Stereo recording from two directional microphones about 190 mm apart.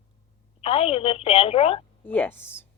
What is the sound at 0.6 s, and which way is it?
A woman's voice, 30° left (ahead or behind).